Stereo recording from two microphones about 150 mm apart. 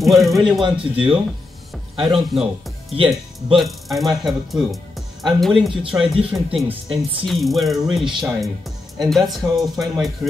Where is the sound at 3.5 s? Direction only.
Centre (ahead or behind).